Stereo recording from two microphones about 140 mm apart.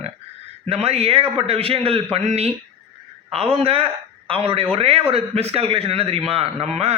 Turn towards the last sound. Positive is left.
turn(degrees=-50)  # may be behind; listen again after turning